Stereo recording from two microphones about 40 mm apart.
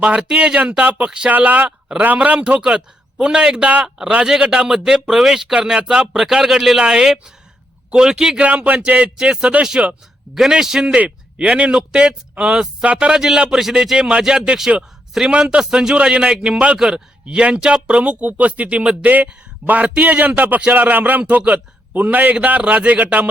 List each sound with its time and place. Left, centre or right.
0.3 s a man's voice: right
2.6 s a man's voice: right
10.5 s a man's voice: centre
11.3 s a man's voice: right
13.1 s a man's voice: centre; by 23.3 s right